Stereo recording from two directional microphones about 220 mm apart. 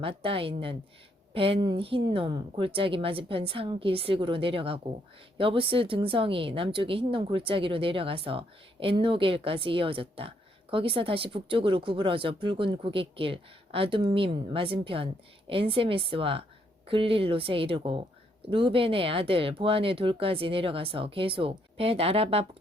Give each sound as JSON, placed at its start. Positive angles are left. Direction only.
{"t": 0.0, "sound": "speech", "side_deg": -25}